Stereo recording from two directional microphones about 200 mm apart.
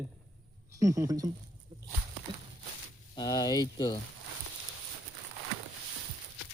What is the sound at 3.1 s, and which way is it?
Speech, 20° left (ahead or behind).